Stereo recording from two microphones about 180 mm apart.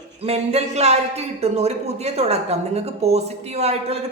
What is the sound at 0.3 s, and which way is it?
Speech, 35° right (ahead or behind).